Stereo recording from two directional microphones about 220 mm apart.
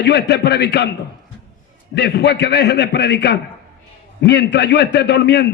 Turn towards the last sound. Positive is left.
turn(degrees=50)  # may be behind; listen again after turning